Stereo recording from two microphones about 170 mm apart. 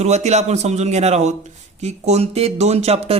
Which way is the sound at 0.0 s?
40° right (ahead or behind).